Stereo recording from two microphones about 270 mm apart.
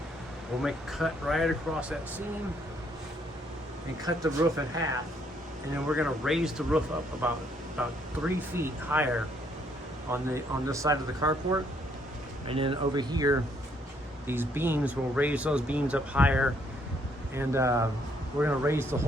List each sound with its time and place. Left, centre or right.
0.6 s speech: centre
4.0 s speech: centre
10.1 s speech: centre